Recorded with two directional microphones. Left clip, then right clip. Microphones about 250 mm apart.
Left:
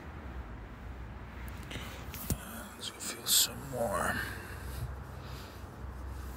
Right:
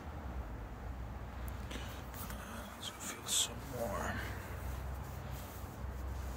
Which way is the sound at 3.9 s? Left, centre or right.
Left.